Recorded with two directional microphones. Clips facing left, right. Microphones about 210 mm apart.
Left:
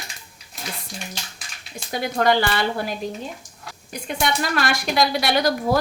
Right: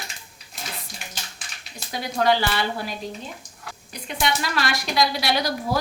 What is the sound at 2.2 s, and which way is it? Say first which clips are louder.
Speech: left 1 dB; 50° left (ahead or behind).